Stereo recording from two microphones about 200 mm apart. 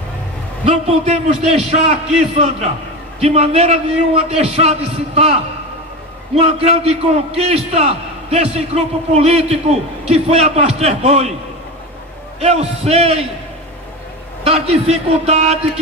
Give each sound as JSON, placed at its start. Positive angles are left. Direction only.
{"t": 0.7, "sound": "a man's voice", "side_deg": -30}
{"t": 12.4, "sound": "a man's voice", "side_deg": -30}
{"t": 14.4, "sound": "a man's voice", "side_deg": -30}